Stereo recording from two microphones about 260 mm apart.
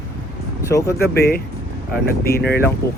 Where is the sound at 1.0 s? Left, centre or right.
Left.